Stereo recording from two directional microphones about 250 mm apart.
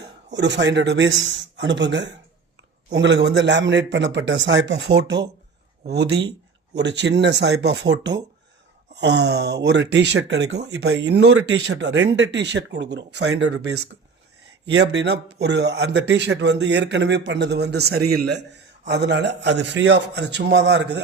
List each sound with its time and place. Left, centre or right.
0.3 s a man's voice: right